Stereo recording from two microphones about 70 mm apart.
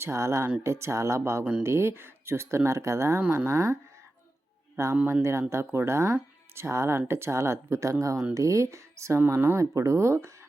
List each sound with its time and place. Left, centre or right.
0.0 s speech: right
4.8 s speech: right